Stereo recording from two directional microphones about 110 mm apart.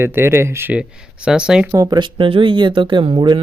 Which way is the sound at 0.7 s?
10° right (ahead or behind).